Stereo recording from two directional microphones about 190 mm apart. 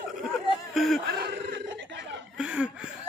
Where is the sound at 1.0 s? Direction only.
60° right (ahead or behind).